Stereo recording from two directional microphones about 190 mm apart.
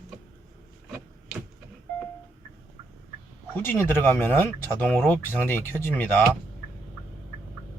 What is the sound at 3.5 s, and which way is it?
Speech, 10° left (ahead or behind).